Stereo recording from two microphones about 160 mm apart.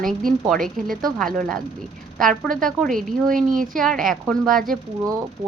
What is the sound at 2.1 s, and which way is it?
Speech, 5° left (ahead or behind).